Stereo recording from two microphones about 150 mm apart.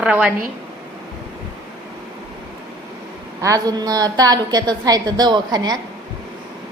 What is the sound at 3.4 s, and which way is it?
A woman's voice, 20° right (ahead or behind).